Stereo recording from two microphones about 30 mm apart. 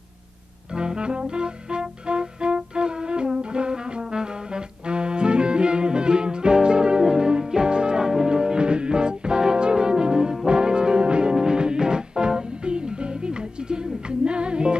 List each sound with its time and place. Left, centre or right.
0.7 s music: right
8.3 s brass instrument: right
11.4 s music: right